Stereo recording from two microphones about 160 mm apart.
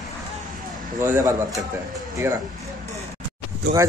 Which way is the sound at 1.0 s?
15° right (ahead or behind).